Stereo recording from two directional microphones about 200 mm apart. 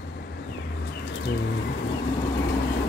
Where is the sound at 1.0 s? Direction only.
60° left (ahead or behind).